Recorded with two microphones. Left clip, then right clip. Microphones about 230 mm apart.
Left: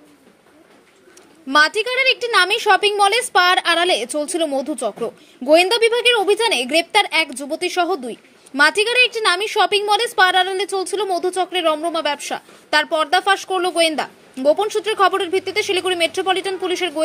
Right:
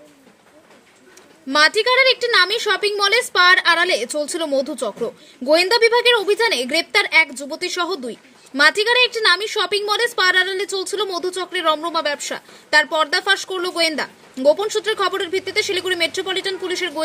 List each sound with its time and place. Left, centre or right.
1.5 s a woman's voice: centre